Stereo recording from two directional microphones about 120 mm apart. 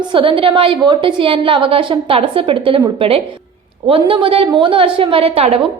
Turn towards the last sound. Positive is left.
turn(degrees=-50)  # may be behind; listen again after turning